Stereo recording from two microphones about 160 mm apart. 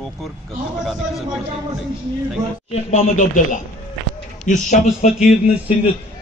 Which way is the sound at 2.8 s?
50° left (ahead or behind).